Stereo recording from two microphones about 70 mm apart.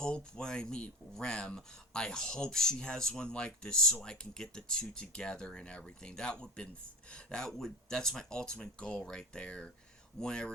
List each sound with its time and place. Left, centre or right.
0.0 s speech: centre